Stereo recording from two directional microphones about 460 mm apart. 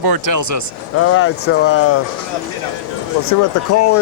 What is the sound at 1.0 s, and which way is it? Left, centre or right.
Speech, left.